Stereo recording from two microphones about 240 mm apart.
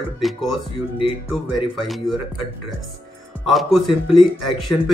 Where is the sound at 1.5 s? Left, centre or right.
Centre.